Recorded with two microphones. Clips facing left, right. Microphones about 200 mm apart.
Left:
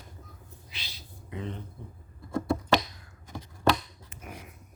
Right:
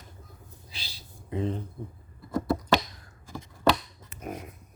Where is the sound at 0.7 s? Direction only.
30° right (ahead or behind).